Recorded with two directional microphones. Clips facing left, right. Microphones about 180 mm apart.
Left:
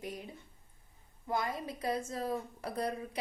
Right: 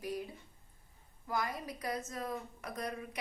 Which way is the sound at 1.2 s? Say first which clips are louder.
Left 2 dB; 25° left (ahead or behind).